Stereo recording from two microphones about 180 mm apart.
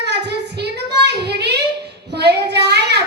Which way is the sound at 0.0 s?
70° right (ahead or behind).